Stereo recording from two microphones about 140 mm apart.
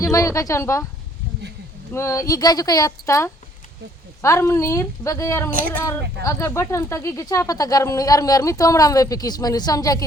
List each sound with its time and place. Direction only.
0.0 s speech: 25° left (ahead or behind)
1.9 s speech: 20° left (ahead or behind)
5.5 s child singing: 90° right
6.2 s speech: 20° left (ahead or behind)